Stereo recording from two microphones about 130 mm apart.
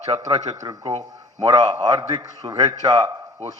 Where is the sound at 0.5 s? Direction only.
25° right (ahead or behind).